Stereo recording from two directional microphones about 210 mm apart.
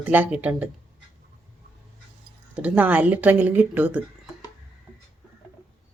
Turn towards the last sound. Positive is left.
turn(degrees=-10)  # may be behind; listen again after turning